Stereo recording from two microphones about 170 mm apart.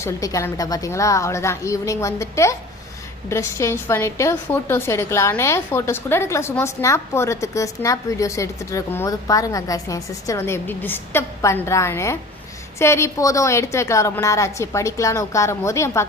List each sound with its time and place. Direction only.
0.0 s a woman's voice: 20° left (ahead or behind)